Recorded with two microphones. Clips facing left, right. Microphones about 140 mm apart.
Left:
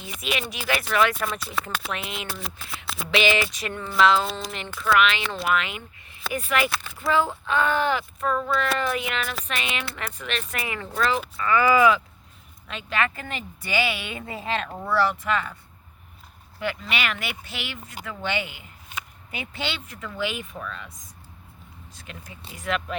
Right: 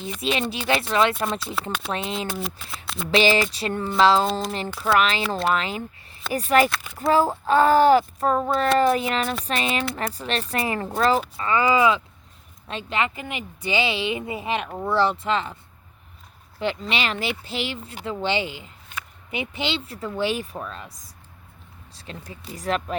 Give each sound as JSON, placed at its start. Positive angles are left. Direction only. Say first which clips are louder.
{"t": 0.2, "sound": "a woman's voice", "louder": "right 4 dB", "side_deg": -30}
{"t": 1.6, "sound": "speech", "louder": "right 1 dB", "side_deg": 0}
{"t": 1.9, "sound": "speech", "louder": "right 5 dB", "side_deg": -30}
{"t": 2.4, "sound": "speech", "louder": "right 4 dB", "side_deg": 0}
{"t": 3.1, "sound": "a woman's voice", "louder": "right 3 dB", "side_deg": -35}
{"t": 13.0, "sound": "a woman's voice", "louder": "even", "side_deg": -15}
{"t": 16.6, "sound": "a woman's voice", "louder": "right 3 dB", "side_deg": -25}